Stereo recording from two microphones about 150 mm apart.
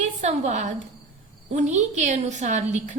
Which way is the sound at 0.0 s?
50° right (ahead or behind).